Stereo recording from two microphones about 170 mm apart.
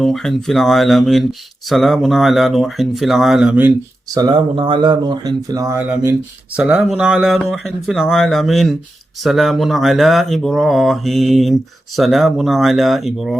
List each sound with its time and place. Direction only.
0.0 s speech: centre (ahead or behind)
4.1 s speech: 25° right (ahead or behind)
6.6 s speech: 5° right (ahead or behind)